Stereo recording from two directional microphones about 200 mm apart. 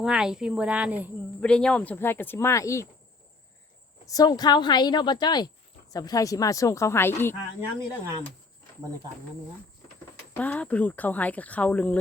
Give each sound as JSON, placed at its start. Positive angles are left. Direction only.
{"t": 0.0, "sound": "speech", "side_deg": -5}
{"t": 1.4, "sound": "speech", "side_deg": 5}
{"t": 4.0, "sound": "speech", "side_deg": 20}
{"t": 10.3, "sound": "speech", "side_deg": 10}